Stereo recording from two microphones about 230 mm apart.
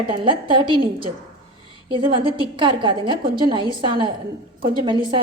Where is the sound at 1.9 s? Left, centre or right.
Right.